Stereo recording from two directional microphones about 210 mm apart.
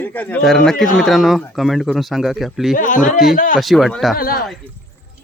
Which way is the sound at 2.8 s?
40° left (ahead or behind).